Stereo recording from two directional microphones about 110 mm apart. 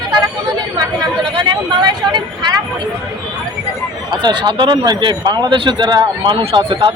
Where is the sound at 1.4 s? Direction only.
45° right (ahead or behind).